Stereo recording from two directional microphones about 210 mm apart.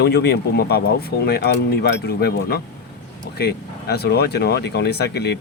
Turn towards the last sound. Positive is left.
turn(degrees=50)  # may be behind; listen again after turning